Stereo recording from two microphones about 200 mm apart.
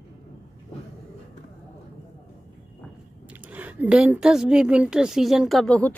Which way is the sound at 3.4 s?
10° right (ahead or behind).